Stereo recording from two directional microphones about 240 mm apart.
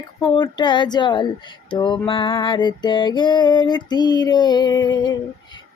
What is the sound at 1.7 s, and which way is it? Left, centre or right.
Female singing, centre.